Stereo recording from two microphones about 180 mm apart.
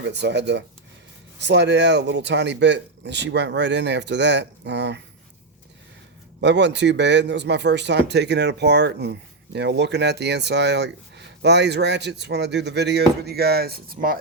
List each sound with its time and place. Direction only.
0.0 s speech: 70° right (ahead or behind)
6.4 s speech: 75° right (ahead or behind); by 14.2 s 55° right (ahead or behind)